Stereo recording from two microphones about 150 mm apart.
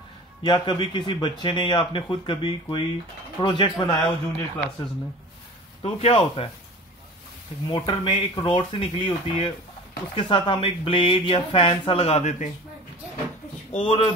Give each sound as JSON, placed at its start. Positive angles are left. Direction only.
{"t": 0.4, "sound": "speech", "side_deg": 30}
{"t": 5.9, "sound": "speech", "side_deg": 45}
{"t": 7.6, "sound": "speech", "side_deg": 35}
{"t": 13.7, "sound": "speech", "side_deg": 40}